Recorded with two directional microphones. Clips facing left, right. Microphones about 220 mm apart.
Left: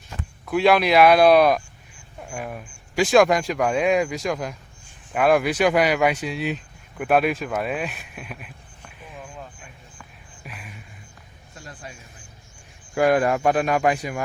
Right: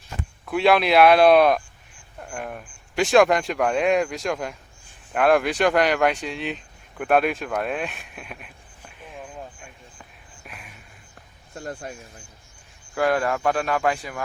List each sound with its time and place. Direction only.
0.4 s speech: centre (ahead or behind)
10.4 s a sound: centre (ahead or behind)
11.5 s speech: 50° right (ahead or behind)
12.9 s speech: 15° left (ahead or behind)